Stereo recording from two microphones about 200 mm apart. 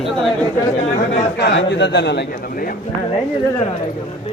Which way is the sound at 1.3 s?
55° left (ahead or behind).